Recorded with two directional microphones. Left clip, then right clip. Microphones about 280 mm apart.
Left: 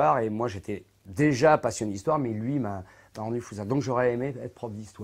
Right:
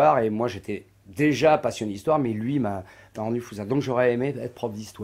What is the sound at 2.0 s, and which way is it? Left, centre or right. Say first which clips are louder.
Speech: right 4 dB; left.